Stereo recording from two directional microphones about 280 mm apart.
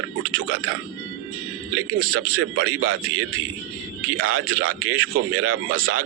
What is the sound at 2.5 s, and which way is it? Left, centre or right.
A man's voice, right.